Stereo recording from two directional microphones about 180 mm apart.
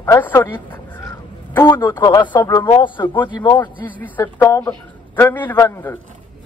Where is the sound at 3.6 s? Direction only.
10° left (ahead or behind).